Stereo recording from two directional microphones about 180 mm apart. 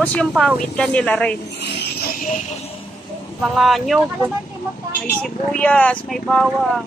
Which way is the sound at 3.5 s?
Centre (ahead or behind).